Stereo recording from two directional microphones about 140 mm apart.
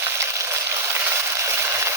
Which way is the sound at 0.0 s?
20° right (ahead or behind).